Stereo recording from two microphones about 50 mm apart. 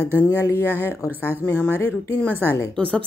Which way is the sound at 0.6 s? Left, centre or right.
Left.